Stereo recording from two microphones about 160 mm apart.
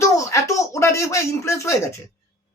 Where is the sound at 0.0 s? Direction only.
20° left (ahead or behind).